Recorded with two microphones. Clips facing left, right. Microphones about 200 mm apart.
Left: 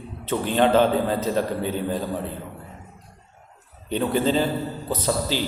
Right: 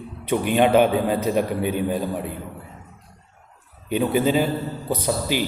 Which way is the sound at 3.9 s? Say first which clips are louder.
Right 2 dB; 10° right (ahead or behind).